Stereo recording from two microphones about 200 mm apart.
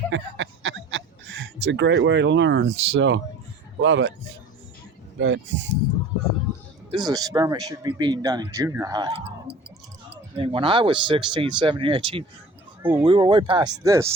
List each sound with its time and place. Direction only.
0.1 s a sound: 70° right (ahead or behind)
3.8 s speech: 70° right (ahead or behind)
5.2 s speech: 70° right (ahead or behind)
7.0 s speech: 20° right (ahead or behind)
10.3 s speech: 25° right (ahead or behind)
12.8 s speech: 10° right (ahead or behind)
13.1 s speech: 25° right (ahead or behind)